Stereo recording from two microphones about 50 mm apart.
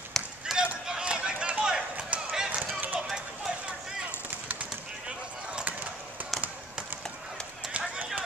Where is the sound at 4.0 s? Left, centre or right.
Right.